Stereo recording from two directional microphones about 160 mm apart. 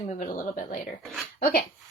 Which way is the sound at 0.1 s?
50° left (ahead or behind).